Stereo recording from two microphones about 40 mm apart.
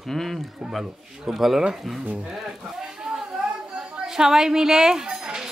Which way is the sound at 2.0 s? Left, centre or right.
Right.